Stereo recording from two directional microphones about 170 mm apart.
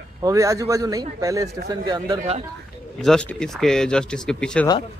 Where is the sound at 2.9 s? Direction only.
5° left (ahead or behind).